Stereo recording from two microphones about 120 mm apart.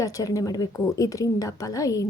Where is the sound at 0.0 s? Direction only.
30° left (ahead or behind).